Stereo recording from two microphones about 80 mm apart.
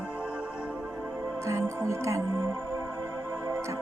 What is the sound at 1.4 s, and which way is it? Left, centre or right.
Music, right.